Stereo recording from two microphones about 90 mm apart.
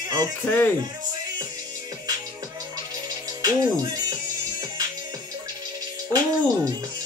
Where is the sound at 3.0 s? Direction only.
50° right (ahead or behind).